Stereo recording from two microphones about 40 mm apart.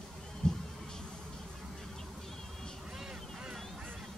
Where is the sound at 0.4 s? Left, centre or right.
Centre.